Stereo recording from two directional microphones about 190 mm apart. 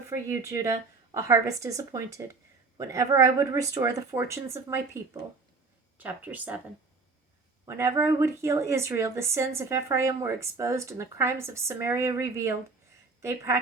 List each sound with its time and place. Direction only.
0.3 s speech: 15° right (ahead or behind)
7.6 s speech: 15° right (ahead or behind)